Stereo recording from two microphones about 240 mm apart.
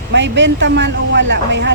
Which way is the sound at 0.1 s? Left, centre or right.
Right.